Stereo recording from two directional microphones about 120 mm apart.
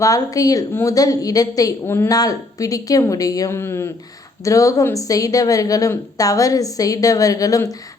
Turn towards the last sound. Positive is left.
turn(degrees=30)  # may be behind; listen again after turning